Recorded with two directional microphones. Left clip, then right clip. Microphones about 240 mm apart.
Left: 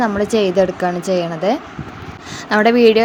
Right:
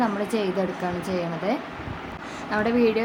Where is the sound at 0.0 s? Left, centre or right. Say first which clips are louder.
Left 9 dB; left.